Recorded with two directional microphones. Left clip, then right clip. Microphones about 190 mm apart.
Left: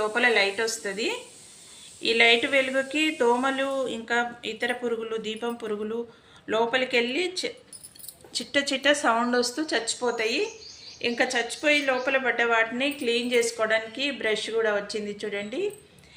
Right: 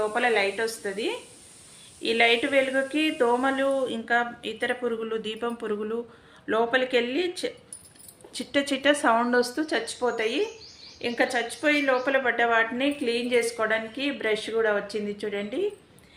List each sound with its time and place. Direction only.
0.0 s a woman's voice: 15° right (ahead or behind)